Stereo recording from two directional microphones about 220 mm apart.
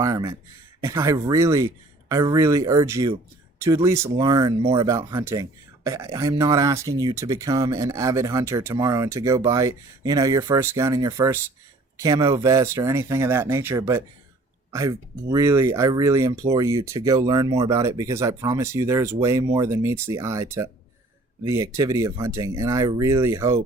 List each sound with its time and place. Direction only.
0.0 s speech: 15° right (ahead or behind)